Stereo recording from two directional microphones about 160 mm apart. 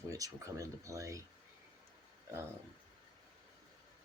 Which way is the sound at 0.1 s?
20° right (ahead or behind).